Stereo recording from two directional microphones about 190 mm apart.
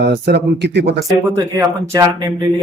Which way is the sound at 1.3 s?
15° right (ahead or behind).